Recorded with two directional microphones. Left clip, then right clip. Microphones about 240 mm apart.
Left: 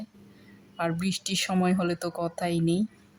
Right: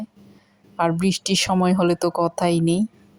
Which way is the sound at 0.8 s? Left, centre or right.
Centre.